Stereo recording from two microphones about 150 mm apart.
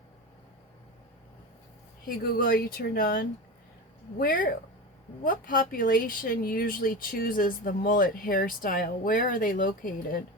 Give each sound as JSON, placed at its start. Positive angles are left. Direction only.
{"t": 2.0, "sound": "speech", "side_deg": 80}